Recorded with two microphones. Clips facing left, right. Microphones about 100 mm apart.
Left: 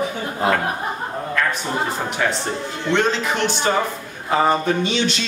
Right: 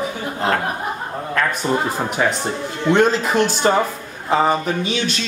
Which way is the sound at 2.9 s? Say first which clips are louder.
Right 4 dB; 40° right (ahead or behind).